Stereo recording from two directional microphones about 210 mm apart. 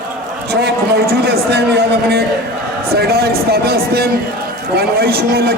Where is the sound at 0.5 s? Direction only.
50° right (ahead or behind).